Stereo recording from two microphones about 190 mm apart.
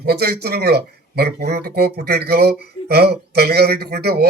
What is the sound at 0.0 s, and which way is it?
Speech, 55° right (ahead or behind).